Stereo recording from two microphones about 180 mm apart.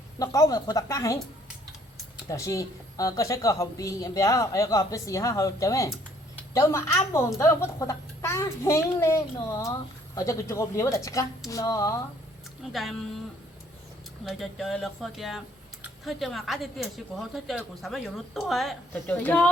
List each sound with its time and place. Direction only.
0.2 s speech: 20° left (ahead or behind)
2.3 s speech: 20° left (ahead or behind)
12.7 s speech: centre (ahead or behind)
14.3 s speech: centre (ahead or behind)